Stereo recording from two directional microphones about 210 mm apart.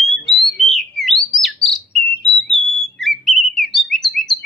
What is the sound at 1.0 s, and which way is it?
Bird, centre (ahead or behind).